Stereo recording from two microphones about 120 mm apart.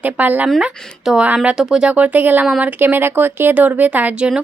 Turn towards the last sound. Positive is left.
turn(degrees=-10)  # may be behind; listen again after turning